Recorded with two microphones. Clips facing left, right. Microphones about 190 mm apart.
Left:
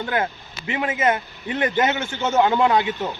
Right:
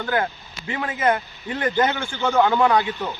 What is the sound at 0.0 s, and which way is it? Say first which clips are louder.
Speech: even; 25° left (ahead or behind).